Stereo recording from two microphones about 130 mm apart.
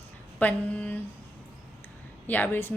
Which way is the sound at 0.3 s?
10° left (ahead or behind).